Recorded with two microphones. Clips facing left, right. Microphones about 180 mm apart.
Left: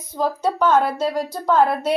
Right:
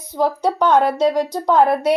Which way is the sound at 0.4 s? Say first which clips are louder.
Right 2 dB; 15° right (ahead or behind).